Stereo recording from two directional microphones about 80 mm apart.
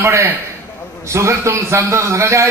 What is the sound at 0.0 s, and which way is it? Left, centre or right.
A man's voice, right.